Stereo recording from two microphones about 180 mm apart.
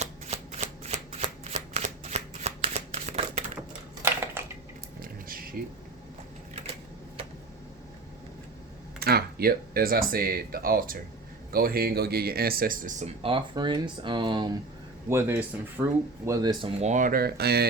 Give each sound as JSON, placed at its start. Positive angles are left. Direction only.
{"t": 0.0, "sound": "shuffling cards", "side_deg": -40}
{"t": 3.7, "sound": "a sound", "side_deg": -15}
{"t": 4.9, "sound": "a sound", "side_deg": -50}
{"t": 9.0, "sound": "speech", "side_deg": -60}
{"t": 13.2, "sound": "speech", "side_deg": -25}
{"t": 15.1, "sound": "speech", "side_deg": -15}
{"t": 16.8, "sound": "speech", "side_deg": -45}